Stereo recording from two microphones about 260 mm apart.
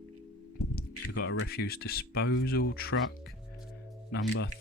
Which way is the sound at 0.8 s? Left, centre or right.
Left.